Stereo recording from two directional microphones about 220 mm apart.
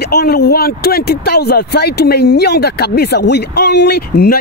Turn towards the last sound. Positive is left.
turn(degrees=45)  # may be behind; listen again after turning